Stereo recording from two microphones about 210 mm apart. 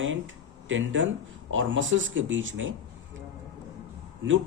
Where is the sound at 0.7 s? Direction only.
65° right (ahead or behind).